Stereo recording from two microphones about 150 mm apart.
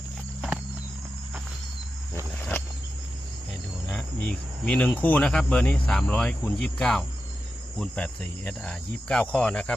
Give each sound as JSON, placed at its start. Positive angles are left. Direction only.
{"t": 2.4, "sound": "a sound", "side_deg": 15}
{"t": 3.8, "sound": "cricket", "side_deg": 5}
{"t": 9.3, "sound": "speech", "side_deg": 5}